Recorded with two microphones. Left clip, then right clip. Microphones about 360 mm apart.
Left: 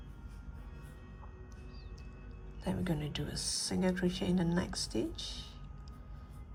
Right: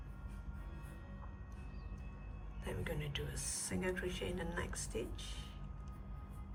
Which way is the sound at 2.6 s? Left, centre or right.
Centre.